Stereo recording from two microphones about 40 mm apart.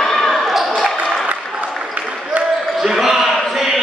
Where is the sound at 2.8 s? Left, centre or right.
Centre.